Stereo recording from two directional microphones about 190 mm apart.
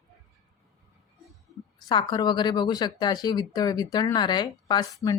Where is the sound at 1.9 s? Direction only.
20° left (ahead or behind).